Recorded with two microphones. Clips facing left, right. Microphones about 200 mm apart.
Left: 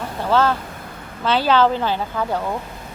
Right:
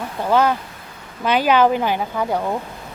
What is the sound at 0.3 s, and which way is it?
Speech, 15° right (ahead or behind).